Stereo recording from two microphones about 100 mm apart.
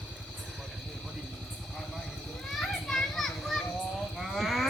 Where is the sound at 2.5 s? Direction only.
5° left (ahead or behind).